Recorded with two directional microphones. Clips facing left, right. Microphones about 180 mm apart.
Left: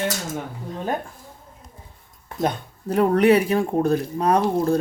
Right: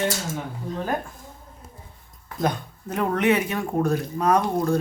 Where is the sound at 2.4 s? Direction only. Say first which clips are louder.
Left 1 dB; 30° left (ahead or behind).